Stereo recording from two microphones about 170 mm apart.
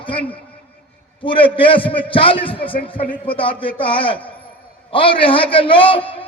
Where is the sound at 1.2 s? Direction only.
30° left (ahead or behind).